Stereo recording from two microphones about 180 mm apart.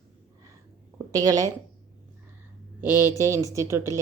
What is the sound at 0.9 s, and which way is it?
Speech, 20° right (ahead or behind).